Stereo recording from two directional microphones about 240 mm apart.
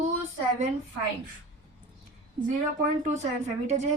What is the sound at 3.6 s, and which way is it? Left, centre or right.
Speech, right.